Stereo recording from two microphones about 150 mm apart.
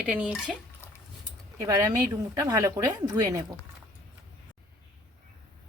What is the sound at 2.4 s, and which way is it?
Speech, 20° right (ahead or behind).